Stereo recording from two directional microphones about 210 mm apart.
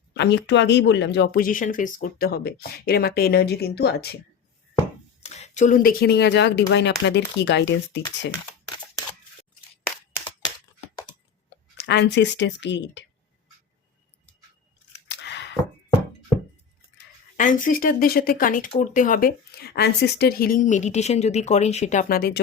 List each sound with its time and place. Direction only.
0.1 s speech: 55° left (ahead or behind)
5.2 s speech: 30° left (ahead or behind); by 8.3 s 55° left (ahead or behind)
11.8 s speech: 55° left (ahead or behind)
15.0 s a sound: 55° left (ahead or behind)
17.3 s speech: 40° left (ahead or behind)